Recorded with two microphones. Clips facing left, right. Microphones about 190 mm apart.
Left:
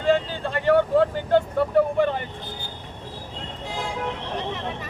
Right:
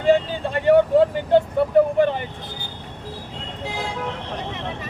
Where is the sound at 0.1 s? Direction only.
20° right (ahead or behind).